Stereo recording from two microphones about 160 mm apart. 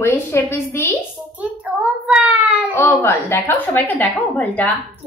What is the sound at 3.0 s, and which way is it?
Speech, 15° left (ahead or behind).